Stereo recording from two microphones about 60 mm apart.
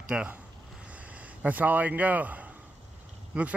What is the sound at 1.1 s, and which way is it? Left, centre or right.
Speech, right.